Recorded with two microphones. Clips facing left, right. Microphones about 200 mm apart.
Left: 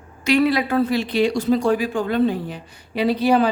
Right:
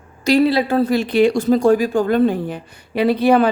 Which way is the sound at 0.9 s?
50° right (ahead or behind).